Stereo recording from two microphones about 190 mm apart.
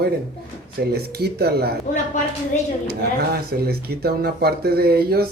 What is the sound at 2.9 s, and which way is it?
Speech, 55° right (ahead or behind).